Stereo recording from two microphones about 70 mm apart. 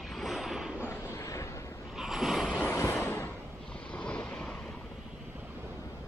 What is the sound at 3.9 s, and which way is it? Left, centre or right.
Vehicle, centre.